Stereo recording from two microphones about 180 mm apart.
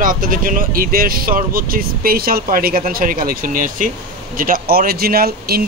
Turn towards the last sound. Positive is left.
turn(degrees=-60)  # may be behind; listen again after turning